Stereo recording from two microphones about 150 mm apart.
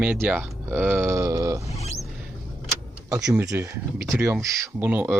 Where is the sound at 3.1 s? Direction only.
20° right (ahead or behind).